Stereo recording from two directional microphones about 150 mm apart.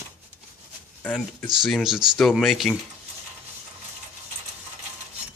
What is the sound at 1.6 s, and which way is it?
Speech, centre (ahead or behind).